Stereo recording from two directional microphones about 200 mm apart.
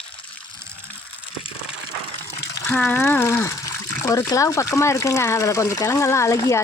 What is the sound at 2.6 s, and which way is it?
Speech, 10° left (ahead or behind).